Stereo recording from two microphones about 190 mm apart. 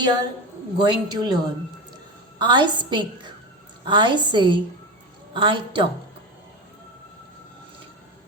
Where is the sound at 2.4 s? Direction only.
25° right (ahead or behind).